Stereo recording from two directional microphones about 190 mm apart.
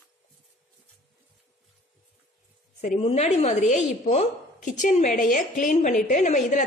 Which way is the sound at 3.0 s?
35° left (ahead or behind).